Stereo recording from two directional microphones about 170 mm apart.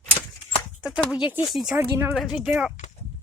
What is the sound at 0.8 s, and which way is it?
Speech, 5° right (ahead or behind).